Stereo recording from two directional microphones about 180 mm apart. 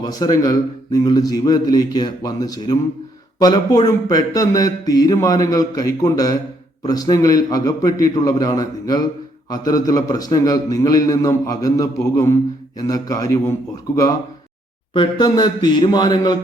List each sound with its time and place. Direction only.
0.0 s speech: 20° left (ahead or behind)
14.9 s speech: 25° left (ahead or behind)